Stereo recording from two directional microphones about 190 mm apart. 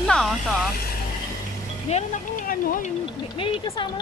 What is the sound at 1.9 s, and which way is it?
Speech, 40° left (ahead or behind).